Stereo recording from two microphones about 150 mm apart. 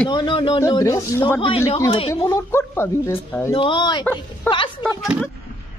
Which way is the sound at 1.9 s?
35° left (ahead or behind).